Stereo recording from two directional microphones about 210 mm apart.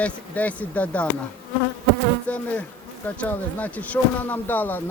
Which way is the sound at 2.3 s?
5° left (ahead or behind).